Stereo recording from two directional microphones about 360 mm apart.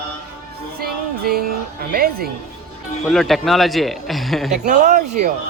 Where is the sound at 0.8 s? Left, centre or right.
Right.